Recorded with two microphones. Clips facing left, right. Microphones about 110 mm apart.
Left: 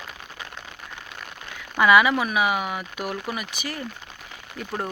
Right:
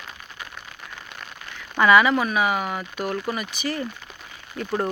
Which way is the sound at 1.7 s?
10° left (ahead or behind).